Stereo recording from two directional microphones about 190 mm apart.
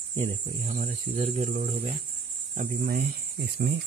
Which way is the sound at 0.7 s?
35° right (ahead or behind).